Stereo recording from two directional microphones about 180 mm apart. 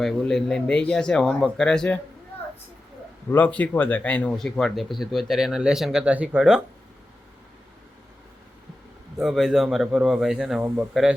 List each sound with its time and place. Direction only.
0.0 s speech: centre (ahead or behind)
3.2 s speech: 10° left (ahead or behind)
9.1 s speech: centre (ahead or behind)